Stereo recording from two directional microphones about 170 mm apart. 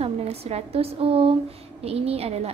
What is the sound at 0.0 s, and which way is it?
A woman's voice, 35° right (ahead or behind).